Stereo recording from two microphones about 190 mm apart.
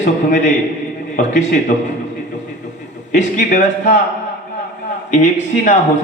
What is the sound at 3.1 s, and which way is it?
Speech, 40° left (ahead or behind).